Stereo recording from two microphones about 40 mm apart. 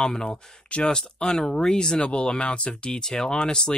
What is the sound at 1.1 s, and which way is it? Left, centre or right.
Speech, centre.